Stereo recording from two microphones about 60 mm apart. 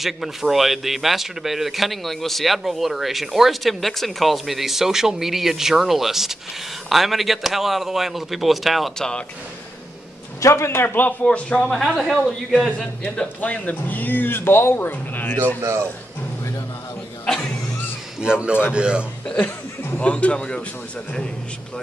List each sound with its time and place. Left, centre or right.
0.0 s speech: centre
8.9 s speech: centre
10.4 s a man's voice: left
11.2 s speech: centre
13.1 s speech: centre
18.2 s speech: centre
20.0 s speech: left